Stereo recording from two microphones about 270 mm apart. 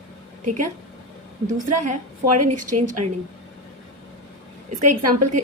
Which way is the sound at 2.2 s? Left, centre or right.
Right.